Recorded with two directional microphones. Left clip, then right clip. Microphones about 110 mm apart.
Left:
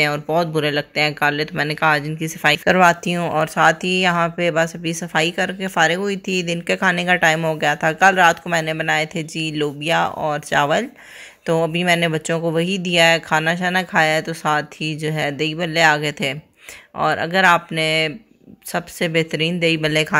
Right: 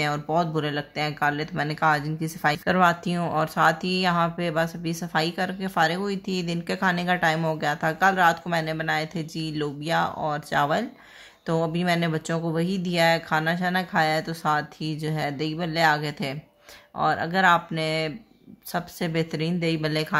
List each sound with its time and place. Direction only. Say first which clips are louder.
0.0 s speech: left 6 dB; 30° left (ahead or behind)
19.9 s speech: left 8 dB; 45° left (ahead or behind)